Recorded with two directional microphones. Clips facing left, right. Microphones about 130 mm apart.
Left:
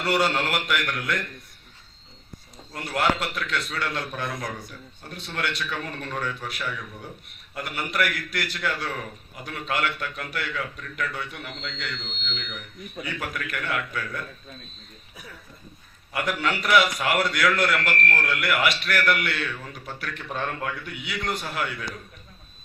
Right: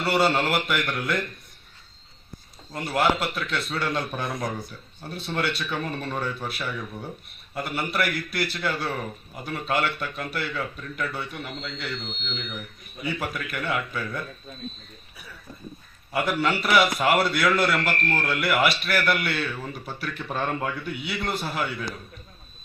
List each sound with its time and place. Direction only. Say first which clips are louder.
0.0 s a man's voice: right 2 dB; 25° right (ahead or behind)
2.7 s a man's voice: right 2 dB; 25° right (ahead or behind)
16.1 s a man's voice: right 2 dB; 20° right (ahead or behind)